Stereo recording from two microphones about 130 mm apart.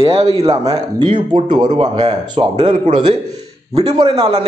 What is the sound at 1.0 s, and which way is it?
Speech, 40° right (ahead or behind).